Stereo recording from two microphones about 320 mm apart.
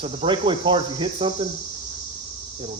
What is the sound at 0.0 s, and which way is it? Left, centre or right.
Speech, centre.